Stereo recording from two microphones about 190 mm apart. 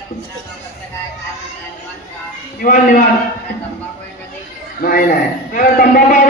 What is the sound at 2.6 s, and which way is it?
Speech, 45° left (ahead or behind).